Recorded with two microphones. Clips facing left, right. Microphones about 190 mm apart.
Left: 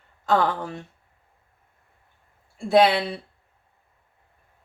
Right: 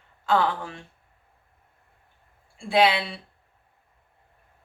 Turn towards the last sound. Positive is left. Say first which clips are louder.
# left 3 dB
turn(degrees=40)  # may be behind; listen again after turning